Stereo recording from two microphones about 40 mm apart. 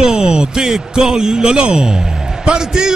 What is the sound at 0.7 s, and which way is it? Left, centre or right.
A man's voice, centre.